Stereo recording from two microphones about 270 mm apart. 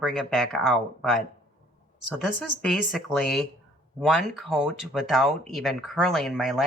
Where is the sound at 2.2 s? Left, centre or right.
Centre.